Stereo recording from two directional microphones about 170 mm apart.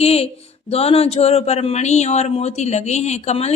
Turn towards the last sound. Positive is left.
turn(degrees=40)  # may be behind; listen again after turning